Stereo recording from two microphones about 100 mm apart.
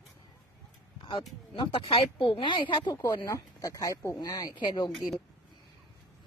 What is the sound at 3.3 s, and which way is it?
Speech, 35° left (ahead or behind).